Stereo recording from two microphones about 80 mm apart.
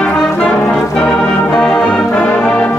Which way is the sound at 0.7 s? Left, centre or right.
Centre.